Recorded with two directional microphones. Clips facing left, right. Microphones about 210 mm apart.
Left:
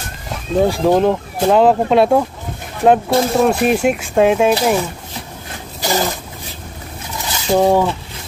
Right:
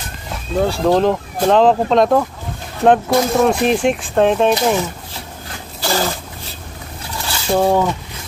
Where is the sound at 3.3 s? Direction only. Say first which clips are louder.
Left 1 dB; 5° left (ahead or behind).